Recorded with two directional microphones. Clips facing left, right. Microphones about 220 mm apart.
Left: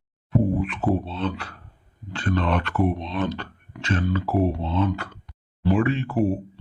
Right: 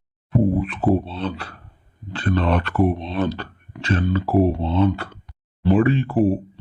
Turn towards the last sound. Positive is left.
turn(degrees=-30)  # may be behind; listen again after turning